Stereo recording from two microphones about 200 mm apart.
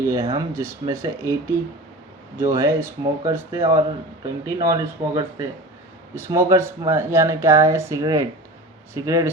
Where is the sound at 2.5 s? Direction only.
15° right (ahead or behind).